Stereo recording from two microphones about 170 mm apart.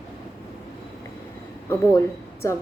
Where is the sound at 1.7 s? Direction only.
15° left (ahead or behind).